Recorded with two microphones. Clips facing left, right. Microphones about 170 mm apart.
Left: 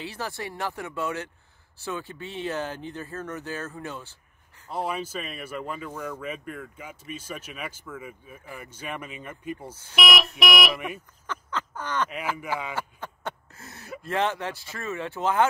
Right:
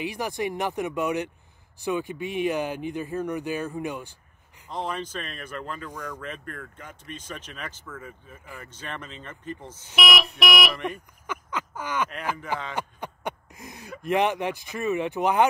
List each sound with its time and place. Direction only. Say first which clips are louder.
0.0 s speech: right 5 dB; 15° right (ahead or behind)
4.6 s speech: left 1 dB; 10° left (ahead or behind)
11.2 s a sound: right 1 dB; 10° right (ahead or behind)
12.7 s speech: right 2 dB; 15° right (ahead or behind)